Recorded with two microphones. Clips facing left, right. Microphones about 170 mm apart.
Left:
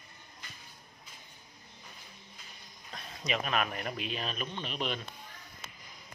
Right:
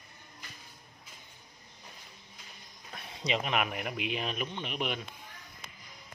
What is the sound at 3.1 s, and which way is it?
Speech, 20° right (ahead or behind).